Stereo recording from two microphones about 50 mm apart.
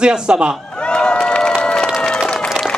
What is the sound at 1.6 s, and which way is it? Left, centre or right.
Run, centre.